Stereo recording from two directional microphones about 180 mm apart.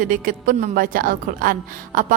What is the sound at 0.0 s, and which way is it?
A woman's voice, 50° right (ahead or behind).